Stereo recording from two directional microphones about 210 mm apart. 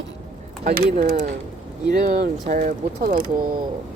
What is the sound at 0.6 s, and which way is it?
Speech, 40° right (ahead or behind).